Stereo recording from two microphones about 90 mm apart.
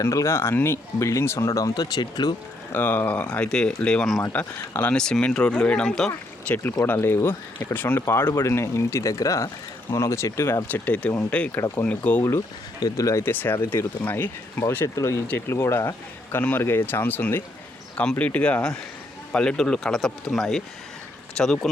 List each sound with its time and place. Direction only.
0.0 s speech: 35° left (ahead or behind)
1.7 s speech: 50° left (ahead or behind)
2.7 s speech: 20° left (ahead or behind)
4.5 s speech: 20° left (ahead or behind)
6.5 s speech: 25° left (ahead or behind)
10.7 s speech: 20° left (ahead or behind)
12.8 s speech: 40° left (ahead or behind)
13.3 s speech: 20° left (ahead or behind)
14.9 s speech: 35° left (ahead or behind); by 21.7 s 5° left (ahead or behind)